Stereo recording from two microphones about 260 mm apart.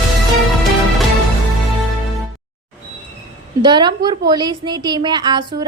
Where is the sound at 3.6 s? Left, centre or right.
Centre.